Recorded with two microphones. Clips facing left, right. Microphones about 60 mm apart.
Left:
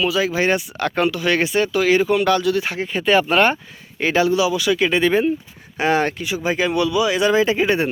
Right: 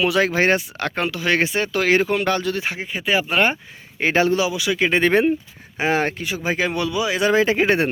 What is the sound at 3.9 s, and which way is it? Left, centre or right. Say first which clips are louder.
Speech: left 1 dB; right.